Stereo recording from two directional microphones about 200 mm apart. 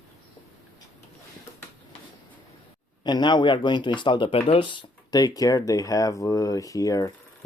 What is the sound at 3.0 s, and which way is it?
Speech, 20° left (ahead or behind).